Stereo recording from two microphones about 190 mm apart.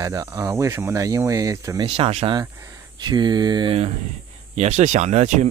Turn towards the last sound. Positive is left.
turn(degrees=-40)  # may be behind; listen again after turning